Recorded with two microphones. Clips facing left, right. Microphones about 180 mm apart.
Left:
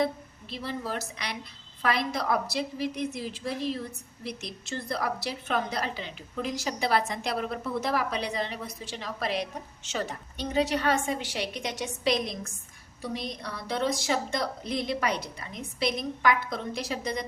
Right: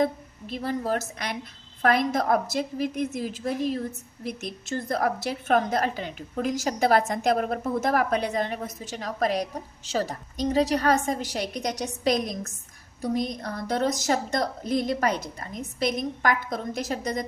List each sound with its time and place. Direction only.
0.0 s a woman's voice: 45° right (ahead or behind)